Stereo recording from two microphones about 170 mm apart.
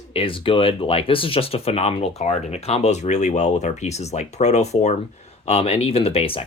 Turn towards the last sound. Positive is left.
turn(degrees=35)  # may be behind; listen again after turning